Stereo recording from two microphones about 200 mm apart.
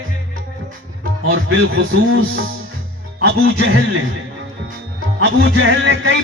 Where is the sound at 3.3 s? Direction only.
90° right.